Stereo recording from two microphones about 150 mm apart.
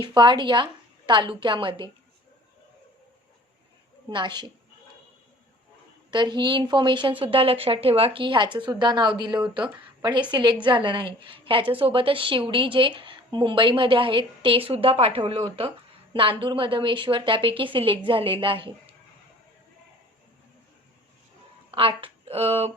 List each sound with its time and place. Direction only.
0.0 s a woman's voice: 30° right (ahead or behind)
4.1 s a woman's voice: 30° right (ahead or behind)
6.1 s a woman's voice: 30° right (ahead or behind)
21.7 s speech: 35° right (ahead or behind)